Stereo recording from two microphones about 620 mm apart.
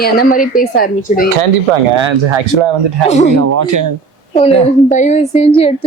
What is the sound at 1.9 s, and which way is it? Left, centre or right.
Speech, right.